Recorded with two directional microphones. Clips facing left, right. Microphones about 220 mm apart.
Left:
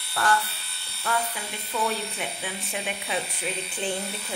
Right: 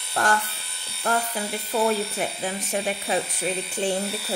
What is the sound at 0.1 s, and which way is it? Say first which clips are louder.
Speech: right 1 dB; 45° right (ahead or behind).